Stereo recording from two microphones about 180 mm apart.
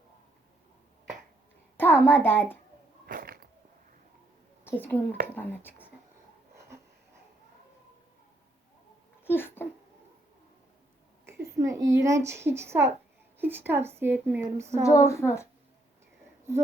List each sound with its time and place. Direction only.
1.7 s a child's voice: 10° left (ahead or behind)
3.1 s a sound: 55° right (ahead or behind)
4.6 s a woman's voice: 10° left (ahead or behind)
9.2 s a sound: 10° left (ahead or behind)
11.3 s a woman's voice: 15° right (ahead or behind)
14.8 s speech: 15° left (ahead or behind)